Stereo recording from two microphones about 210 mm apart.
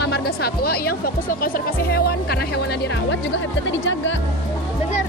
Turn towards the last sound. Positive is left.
turn(degrees=60)  # may be behind; listen again after turning